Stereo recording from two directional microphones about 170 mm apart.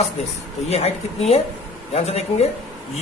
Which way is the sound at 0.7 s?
40° left (ahead or behind).